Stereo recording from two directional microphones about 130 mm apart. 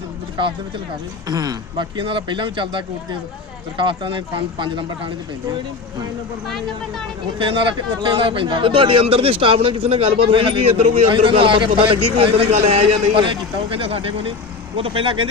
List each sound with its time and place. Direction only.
1.3 s speech: 30° right (ahead or behind)
7.3 s a man's voice: 40° right (ahead or behind); by 11.1 s 55° right (ahead or behind)
11.1 s a man's voice: 45° right (ahead or behind)